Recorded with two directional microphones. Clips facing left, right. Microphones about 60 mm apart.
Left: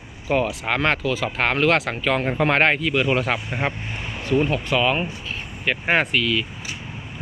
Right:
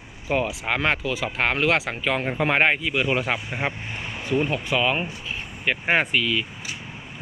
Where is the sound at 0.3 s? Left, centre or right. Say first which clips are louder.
Left 2 dB; centre.